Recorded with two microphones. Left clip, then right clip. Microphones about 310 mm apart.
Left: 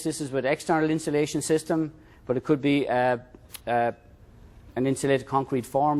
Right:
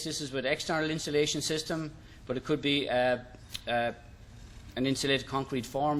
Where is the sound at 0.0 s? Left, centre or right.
Left.